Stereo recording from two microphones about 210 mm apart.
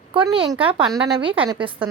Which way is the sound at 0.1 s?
25° right (ahead or behind).